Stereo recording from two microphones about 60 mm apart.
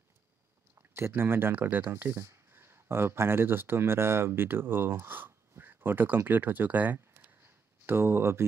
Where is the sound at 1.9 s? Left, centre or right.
Right.